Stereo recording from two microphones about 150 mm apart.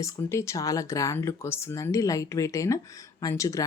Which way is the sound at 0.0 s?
20° left (ahead or behind).